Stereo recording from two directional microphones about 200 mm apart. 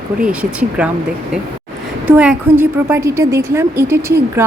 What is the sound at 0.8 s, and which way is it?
Speech, 5° right (ahead or behind).